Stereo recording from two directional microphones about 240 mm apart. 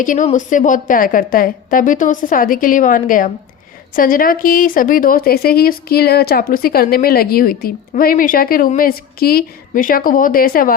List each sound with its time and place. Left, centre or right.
0.0 s speech: left